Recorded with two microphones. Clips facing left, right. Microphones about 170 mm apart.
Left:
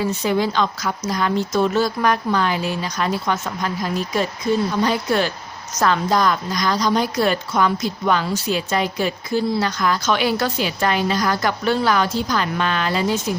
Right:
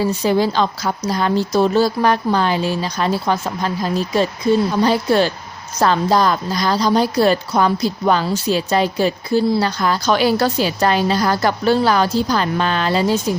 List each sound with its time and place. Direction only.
0.0 s a woman's voice: 35° right (ahead or behind)